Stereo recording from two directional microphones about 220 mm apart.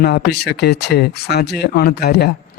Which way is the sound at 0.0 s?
45° left (ahead or behind).